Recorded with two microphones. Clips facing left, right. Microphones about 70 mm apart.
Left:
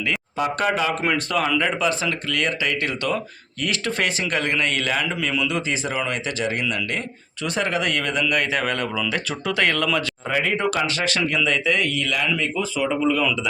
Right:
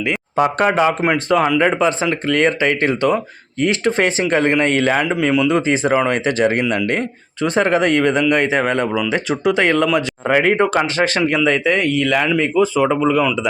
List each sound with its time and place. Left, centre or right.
0.1 s speech: right
1.0 s speech: right
10.2 s speech: right